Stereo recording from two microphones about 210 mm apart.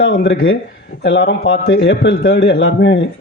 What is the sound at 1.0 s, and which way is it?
Speech, 55° left (ahead or behind).